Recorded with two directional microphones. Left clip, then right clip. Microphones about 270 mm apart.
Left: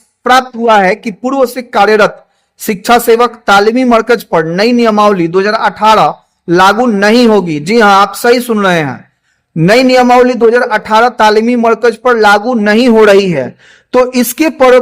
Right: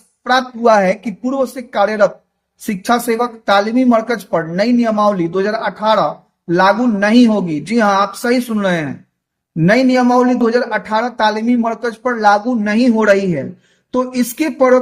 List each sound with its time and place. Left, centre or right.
0.2 s a man's voice: left